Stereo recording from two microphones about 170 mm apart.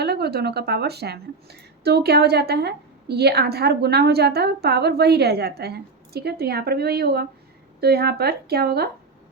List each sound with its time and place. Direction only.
0.0 s a woman's voice: 70° right (ahead or behind)